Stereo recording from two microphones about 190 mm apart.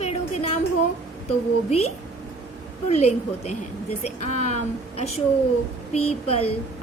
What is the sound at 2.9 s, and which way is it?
A woman's voice, 35° left (ahead or behind).